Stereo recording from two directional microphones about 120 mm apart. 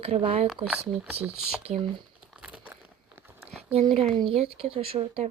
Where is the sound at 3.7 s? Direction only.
60° right (ahead or behind).